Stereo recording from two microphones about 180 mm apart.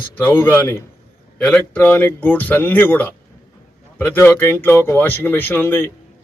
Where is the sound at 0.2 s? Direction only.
10° left (ahead or behind).